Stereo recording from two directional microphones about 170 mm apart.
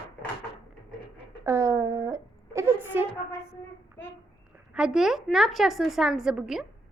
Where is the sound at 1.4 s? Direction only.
15° right (ahead or behind).